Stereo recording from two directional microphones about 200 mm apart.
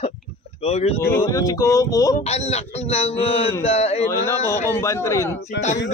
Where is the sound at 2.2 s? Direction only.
30° left (ahead or behind).